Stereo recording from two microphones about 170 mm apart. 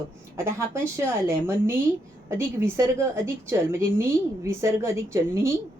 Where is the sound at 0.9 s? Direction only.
15° right (ahead or behind).